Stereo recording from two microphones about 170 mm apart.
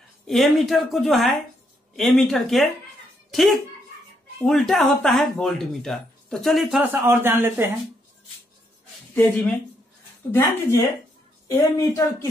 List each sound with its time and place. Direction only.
0.3 s speech: centre (ahead or behind)
6.9 s speech: 15° right (ahead or behind)
9.1 s a woman's voice: 10° left (ahead or behind)